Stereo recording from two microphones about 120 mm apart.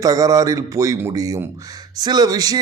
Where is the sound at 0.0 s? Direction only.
30° right (ahead or behind).